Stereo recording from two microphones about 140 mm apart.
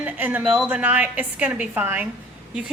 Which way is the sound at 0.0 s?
10° right (ahead or behind).